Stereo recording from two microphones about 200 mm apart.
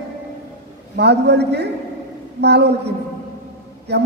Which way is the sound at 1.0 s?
55° right (ahead or behind).